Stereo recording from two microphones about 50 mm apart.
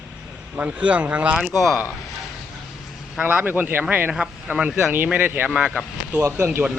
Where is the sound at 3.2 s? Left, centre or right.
Right.